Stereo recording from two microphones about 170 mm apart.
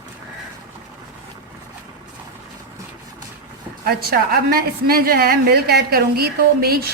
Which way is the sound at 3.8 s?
65° right (ahead or behind).